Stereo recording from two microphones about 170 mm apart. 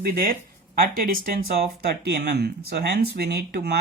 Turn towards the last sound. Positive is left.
turn(degrees=-75)  # may be behind; listen again after turning